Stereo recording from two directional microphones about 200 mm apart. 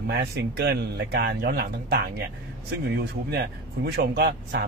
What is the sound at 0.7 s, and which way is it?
Speech, 55° right (ahead or behind).